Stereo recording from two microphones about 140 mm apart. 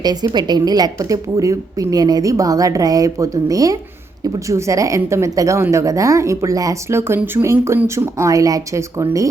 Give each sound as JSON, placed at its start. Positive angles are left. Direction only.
{"t": 0.0, "sound": "speech", "side_deg": -30}